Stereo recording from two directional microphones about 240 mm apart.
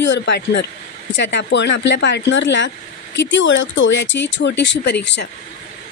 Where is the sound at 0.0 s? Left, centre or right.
Left.